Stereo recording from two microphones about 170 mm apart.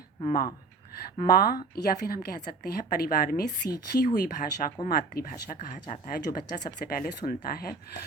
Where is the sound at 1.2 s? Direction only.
60° left (ahead or behind).